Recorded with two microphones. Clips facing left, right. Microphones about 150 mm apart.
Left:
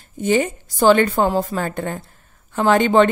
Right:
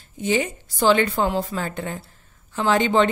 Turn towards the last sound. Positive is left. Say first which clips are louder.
# left 4 dB
turn(degrees=55)  # may be behind; listen again after turning